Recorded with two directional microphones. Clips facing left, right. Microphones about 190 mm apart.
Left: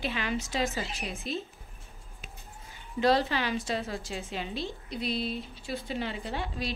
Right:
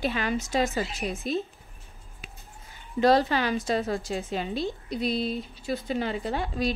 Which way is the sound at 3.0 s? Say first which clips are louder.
Right 4 dB; 50° right (ahead or behind).